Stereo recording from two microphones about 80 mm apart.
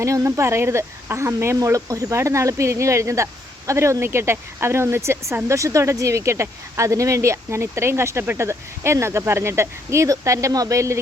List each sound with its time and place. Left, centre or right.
0.0 s speech: right